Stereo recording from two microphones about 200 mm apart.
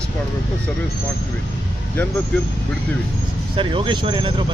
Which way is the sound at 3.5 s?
25° right (ahead or behind).